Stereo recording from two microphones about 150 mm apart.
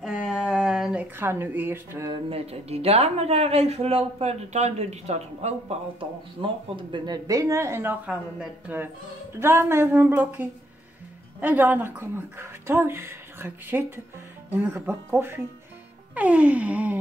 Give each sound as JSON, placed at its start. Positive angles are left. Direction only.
{"t": 0.0, "sound": "a sound", "side_deg": -5}
{"t": 1.1, "sound": "speech", "side_deg": -15}
{"t": 2.0, "sound": "speech", "side_deg": -40}